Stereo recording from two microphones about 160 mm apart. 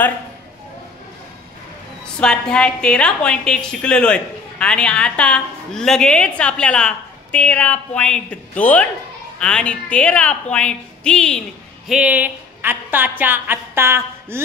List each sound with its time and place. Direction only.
2.1 s a woman's voice: 5° left (ahead or behind)
11.9 s a woman's voice: 10° right (ahead or behind)